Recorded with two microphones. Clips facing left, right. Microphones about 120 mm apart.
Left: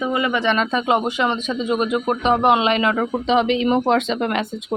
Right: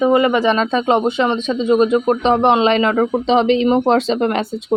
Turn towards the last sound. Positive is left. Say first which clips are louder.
# right 4 dB
turn(degrees=-35)  # may be behind; listen again after turning